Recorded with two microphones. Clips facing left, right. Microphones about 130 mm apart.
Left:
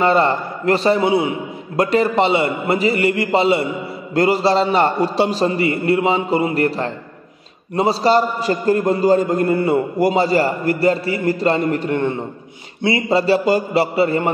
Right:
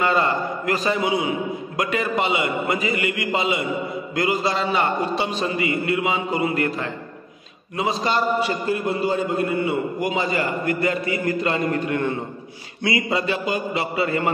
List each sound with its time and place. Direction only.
0.0 s a man's voice: 30° left (ahead or behind)